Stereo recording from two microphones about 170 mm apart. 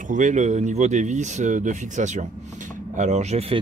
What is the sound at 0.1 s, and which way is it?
Speech, 45° right (ahead or behind).